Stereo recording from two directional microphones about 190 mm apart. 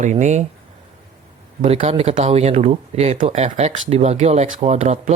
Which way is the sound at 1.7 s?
35° right (ahead or behind).